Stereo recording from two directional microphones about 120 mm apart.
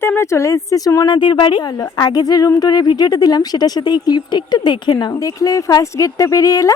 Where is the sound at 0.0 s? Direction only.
20° left (ahead or behind).